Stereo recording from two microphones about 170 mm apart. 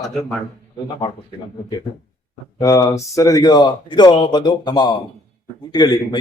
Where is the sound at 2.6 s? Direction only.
20° left (ahead or behind).